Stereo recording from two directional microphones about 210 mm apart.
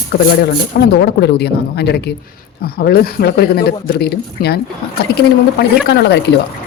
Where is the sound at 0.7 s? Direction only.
45° left (ahead or behind).